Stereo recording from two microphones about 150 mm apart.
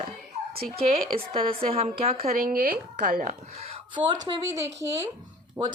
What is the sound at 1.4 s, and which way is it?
Speech, 40° right (ahead or behind).